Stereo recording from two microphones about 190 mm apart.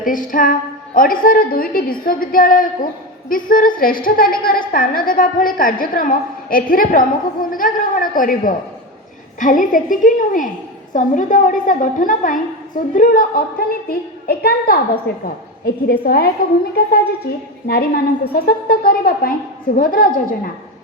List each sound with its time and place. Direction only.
0.0 s a woman's voice: 45° left (ahead or behind)
17.7 s a woman's voice: 55° left (ahead or behind)